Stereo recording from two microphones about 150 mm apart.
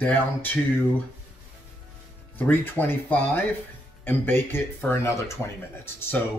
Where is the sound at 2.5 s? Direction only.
15° left (ahead or behind).